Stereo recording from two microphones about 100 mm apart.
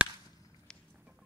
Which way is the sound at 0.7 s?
5° left (ahead or behind).